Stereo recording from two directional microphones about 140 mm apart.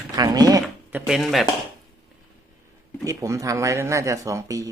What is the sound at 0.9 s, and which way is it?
Speech, 10° right (ahead or behind).